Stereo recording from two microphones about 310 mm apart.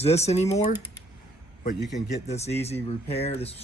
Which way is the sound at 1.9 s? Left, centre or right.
Left.